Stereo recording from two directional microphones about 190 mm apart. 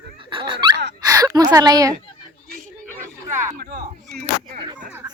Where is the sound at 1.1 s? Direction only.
20° right (ahead or behind).